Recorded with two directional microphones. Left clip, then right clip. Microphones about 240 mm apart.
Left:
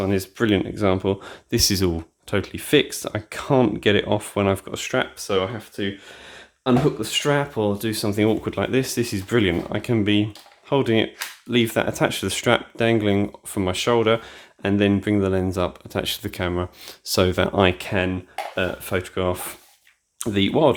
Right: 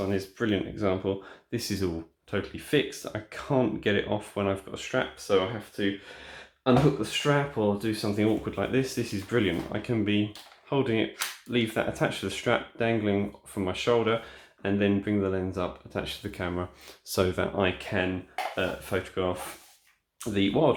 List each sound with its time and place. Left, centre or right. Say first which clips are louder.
0.0 s speech: left 7 dB; left